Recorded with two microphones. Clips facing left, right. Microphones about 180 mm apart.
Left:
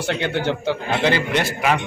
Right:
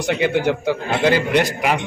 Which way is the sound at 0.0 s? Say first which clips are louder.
Right 4 dB; 15° right (ahead or behind).